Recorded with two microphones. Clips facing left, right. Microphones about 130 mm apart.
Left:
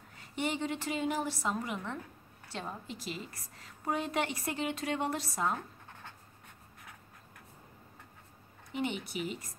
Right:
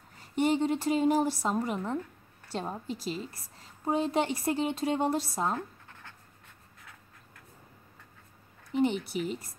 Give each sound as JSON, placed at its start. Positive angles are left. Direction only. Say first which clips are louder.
{"t": 0.2, "sound": "a woman's voice", "louder": "right 8 dB", "side_deg": -40}
{"t": 8.7, "sound": "a woman's voice", "louder": "right 8 dB", "side_deg": -40}